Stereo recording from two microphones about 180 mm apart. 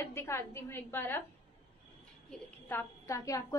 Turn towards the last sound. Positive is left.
turn(degrees=20)  # may be behind; listen again after turning